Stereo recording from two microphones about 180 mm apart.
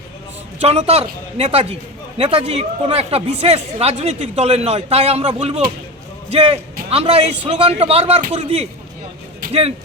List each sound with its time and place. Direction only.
0.6 s a man's voice: 35° right (ahead or behind)